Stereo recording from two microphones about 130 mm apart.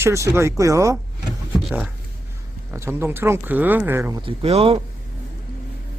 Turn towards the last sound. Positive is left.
turn(degrees=-50)  # may be behind; listen again after turning